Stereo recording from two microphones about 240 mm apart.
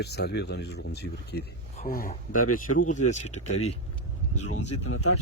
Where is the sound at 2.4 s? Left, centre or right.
Left.